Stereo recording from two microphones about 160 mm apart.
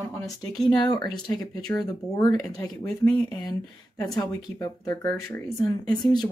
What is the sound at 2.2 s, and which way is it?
Speech, 25° left (ahead or behind).